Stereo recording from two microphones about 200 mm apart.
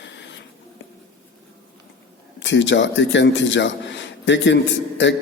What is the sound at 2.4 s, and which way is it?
A man's voice, 65° left (ahead or behind).